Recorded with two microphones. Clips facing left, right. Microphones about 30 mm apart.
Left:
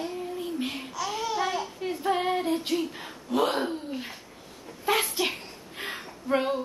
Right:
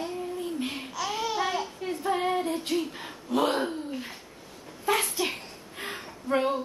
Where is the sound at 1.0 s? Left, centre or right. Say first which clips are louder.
Even; centre.